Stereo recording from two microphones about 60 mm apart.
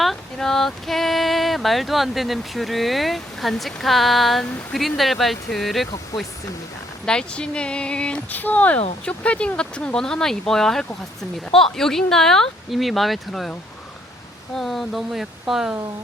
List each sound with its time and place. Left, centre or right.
0.0 s speech: centre
7.0 s speech: centre
8.3 s speech: left; by 13.5 s centre
14.5 s speech: centre